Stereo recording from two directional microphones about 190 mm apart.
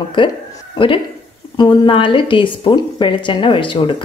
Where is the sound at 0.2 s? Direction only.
25° left (ahead or behind).